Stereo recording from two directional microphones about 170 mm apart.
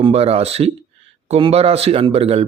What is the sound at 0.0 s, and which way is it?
A man's voice, 35° right (ahead or behind).